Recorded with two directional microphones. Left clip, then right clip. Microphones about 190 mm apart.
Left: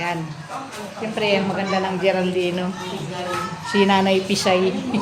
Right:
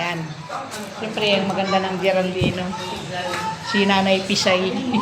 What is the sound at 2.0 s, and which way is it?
Speech, 30° left (ahead or behind).